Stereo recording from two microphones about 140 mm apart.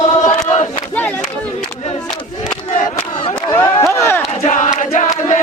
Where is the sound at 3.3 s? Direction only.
30° left (ahead or behind).